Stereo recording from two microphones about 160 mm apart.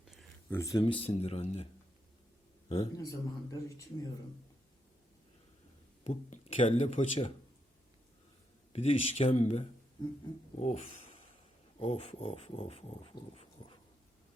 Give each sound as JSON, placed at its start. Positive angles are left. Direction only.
{"t": 0.5, "sound": "speech", "side_deg": 20}
{"t": 2.6, "sound": "a man's voice", "side_deg": 40}
{"t": 2.9, "sound": "a man's voice", "side_deg": 20}
{"t": 6.1, "sound": "speech", "side_deg": 40}
{"t": 8.7, "sound": "speech", "side_deg": 40}